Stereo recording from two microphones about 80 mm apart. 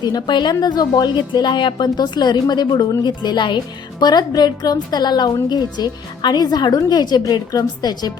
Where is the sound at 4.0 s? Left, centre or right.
Left.